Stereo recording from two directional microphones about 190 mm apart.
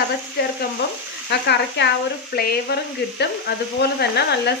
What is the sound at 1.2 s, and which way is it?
A woman's voice, 65° left (ahead or behind).